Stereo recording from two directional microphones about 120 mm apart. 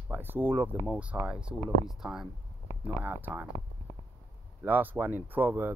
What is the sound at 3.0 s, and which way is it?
Speech, 15° right (ahead or behind).